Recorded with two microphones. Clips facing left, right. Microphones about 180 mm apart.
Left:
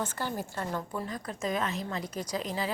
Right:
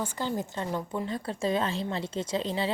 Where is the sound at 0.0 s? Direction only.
15° right (ahead or behind).